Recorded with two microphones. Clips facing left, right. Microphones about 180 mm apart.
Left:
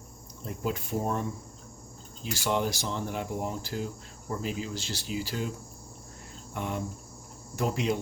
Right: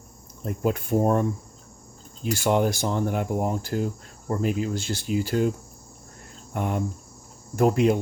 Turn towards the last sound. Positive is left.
turn(degrees=-50)  # may be behind; listen again after turning